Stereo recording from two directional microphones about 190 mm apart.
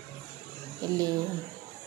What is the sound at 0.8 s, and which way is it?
Speech, 20° right (ahead or behind).